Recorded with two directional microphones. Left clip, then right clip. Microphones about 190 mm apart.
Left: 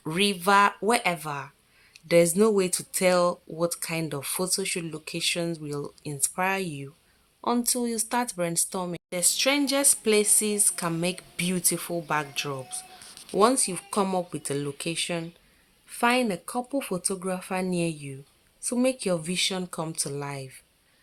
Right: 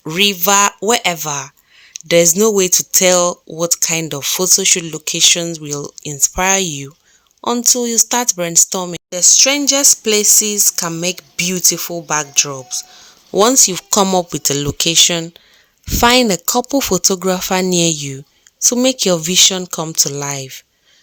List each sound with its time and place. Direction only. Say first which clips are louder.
0.0 s speech: right 11 dB; 35° right (ahead or behind)